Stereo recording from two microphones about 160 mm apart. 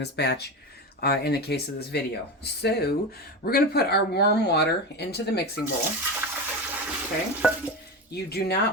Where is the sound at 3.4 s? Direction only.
75° left (ahead or behind); by 5.5 s 90° left.